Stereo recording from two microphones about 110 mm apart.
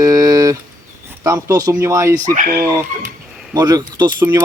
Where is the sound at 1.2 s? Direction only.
30° right (ahead or behind).